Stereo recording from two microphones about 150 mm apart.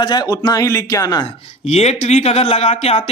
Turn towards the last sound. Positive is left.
turn(degrees=40)  # may be behind; listen again after turning